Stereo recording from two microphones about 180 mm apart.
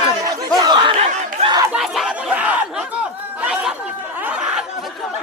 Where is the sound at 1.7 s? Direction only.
Centre (ahead or behind).